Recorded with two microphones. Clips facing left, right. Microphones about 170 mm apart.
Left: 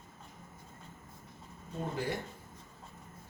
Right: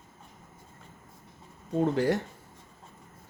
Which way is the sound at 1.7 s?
80° right.